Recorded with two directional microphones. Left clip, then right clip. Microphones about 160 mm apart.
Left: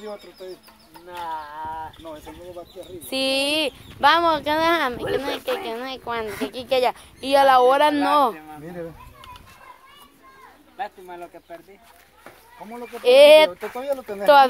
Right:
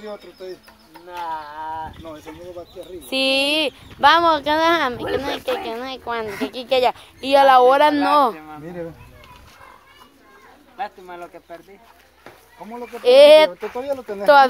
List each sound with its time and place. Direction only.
0.0 s speech: 10° left (ahead or behind)
1.0 s speech: 5° right (ahead or behind)
1.9 s speech: 5° left (ahead or behind)
8.6 s speech: 20° left (ahead or behind)
10.8 s speech: centre (ahead or behind)
12.8 s speech: centre (ahead or behind)
13.6 s speech: 15° left (ahead or behind)
14.2 s speech: 5° left (ahead or behind)